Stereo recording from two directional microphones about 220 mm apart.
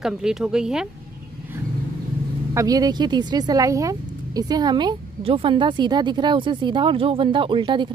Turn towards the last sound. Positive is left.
turn(degrees=-20)  # may be behind; listen again after turning